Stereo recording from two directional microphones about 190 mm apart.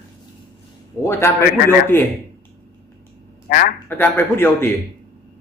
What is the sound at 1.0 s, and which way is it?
A man's voice, 15° left (ahead or behind).